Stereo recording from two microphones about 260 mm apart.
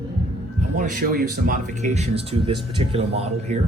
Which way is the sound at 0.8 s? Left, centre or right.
Right.